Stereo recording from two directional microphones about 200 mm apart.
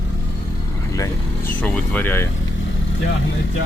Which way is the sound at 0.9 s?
15° left (ahead or behind).